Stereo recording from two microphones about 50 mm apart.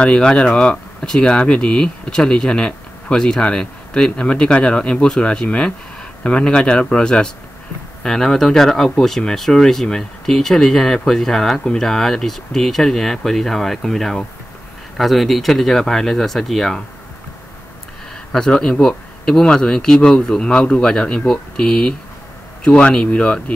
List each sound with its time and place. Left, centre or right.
0.0 s speech: centre
18.3 s speech: centre